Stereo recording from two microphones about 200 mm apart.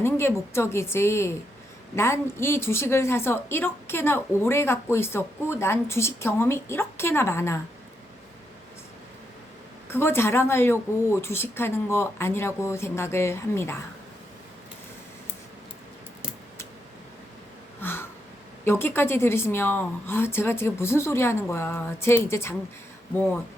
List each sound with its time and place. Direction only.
0.0 s a woman's voice: 10° left (ahead or behind)
9.9 s a woman's voice: 10° left (ahead or behind)
17.7 s a sound: 10° left (ahead or behind)
18.6 s a woman's voice: 10° left (ahead or behind)